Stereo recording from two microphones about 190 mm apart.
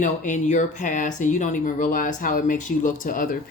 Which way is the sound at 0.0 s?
40° left (ahead or behind).